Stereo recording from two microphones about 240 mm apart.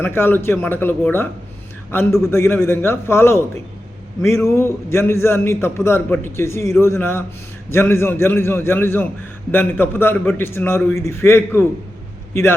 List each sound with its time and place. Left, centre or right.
0.0 s a man's voice: centre